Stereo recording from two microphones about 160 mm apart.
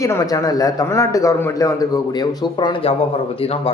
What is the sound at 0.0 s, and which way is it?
Speech, 20° left (ahead or behind).